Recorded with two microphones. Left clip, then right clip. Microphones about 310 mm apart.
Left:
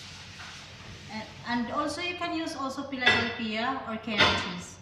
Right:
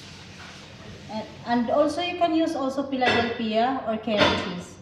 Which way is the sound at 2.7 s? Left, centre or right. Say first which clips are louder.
Left 1 dB; centre.